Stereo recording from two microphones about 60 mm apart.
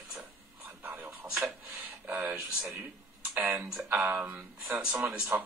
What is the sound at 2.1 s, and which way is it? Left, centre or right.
Speech, right.